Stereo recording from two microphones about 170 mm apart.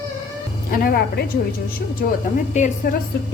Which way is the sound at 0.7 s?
60° left (ahead or behind).